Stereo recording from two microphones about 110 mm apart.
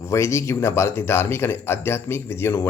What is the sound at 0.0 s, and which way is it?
Speech, 25° left (ahead or behind).